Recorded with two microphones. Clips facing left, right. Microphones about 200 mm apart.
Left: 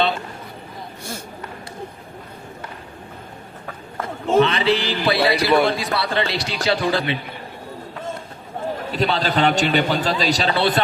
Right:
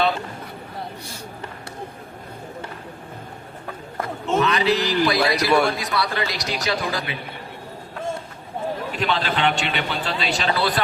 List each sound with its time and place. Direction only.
4.4 s a man's voice: 30° left (ahead or behind)
8.9 s a man's voice: 35° left (ahead or behind)